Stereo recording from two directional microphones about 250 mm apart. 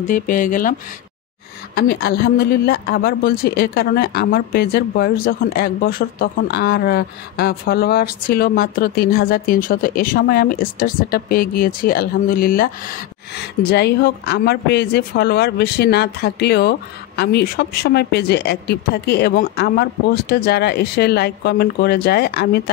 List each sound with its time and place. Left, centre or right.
0.0 s a woman's voice: left
1.8 s a woman's voice: left